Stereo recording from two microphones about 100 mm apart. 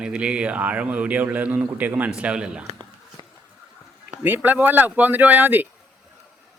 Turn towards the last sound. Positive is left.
turn(degrees=-20)  # may be behind; listen again after turning